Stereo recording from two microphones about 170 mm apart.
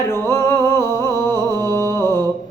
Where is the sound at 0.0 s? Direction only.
15° left (ahead or behind).